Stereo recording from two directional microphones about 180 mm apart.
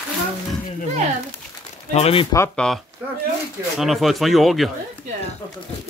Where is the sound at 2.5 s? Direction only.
5° left (ahead or behind).